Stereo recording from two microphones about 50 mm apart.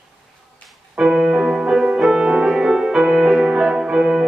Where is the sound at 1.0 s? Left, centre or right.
Centre.